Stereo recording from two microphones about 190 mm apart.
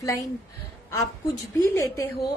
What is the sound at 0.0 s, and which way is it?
Speech, 15° left (ahead or behind).